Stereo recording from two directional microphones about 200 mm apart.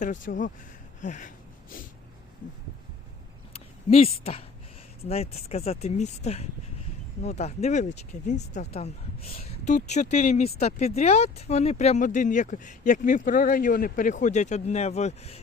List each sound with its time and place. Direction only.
0.0 s speech: 40° left (ahead or behind)
3.5 s a sound: 30° left (ahead or behind)
5.0 s speech: 30° left (ahead or behind)